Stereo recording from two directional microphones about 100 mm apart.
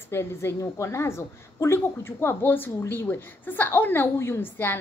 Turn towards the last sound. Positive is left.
turn(degrees=20)  # may be behind; listen again after turning